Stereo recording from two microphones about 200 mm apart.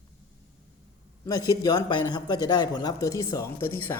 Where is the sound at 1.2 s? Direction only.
15° left (ahead or behind).